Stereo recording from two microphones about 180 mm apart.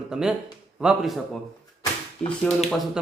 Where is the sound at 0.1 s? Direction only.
5° right (ahead or behind).